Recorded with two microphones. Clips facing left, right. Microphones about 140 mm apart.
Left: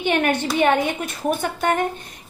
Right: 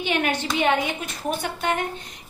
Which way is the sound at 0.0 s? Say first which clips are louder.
Left 4 dB; 55° left (ahead or behind).